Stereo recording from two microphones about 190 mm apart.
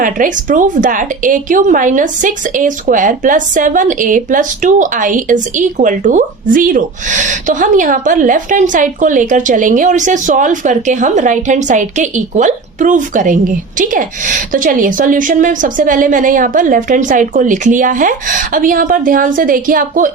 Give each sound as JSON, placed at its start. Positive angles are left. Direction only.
{"t": 0.0, "sound": "speech", "side_deg": -45}